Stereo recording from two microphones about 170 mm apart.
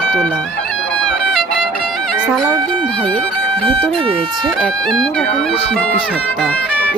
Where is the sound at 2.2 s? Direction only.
Centre (ahead or behind).